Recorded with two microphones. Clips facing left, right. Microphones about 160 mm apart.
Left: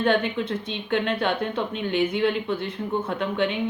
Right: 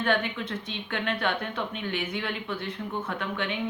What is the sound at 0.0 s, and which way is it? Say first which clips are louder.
Speech: left 5 dB; 30° left (ahead or behind).